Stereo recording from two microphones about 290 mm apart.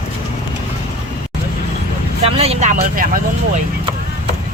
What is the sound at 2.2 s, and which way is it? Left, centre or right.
Speech, centre.